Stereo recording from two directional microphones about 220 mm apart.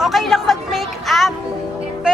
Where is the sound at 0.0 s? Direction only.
Centre (ahead or behind).